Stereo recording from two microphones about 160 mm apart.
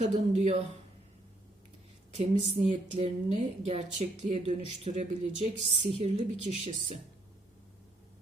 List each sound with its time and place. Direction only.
0.0 s speech: 40° right (ahead or behind)
2.1 s a woman's voice: 40° right (ahead or behind)